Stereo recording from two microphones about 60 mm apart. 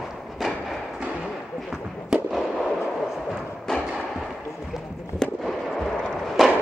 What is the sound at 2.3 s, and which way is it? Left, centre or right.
Fireworks, centre.